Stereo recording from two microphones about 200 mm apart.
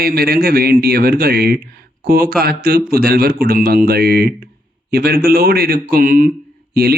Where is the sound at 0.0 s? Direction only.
50° right (ahead or behind).